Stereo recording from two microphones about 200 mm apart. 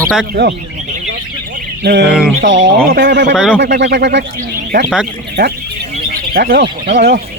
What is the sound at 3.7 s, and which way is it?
Speech, 65° right (ahead or behind).